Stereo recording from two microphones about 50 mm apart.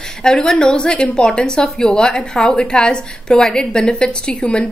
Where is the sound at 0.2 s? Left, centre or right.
Centre.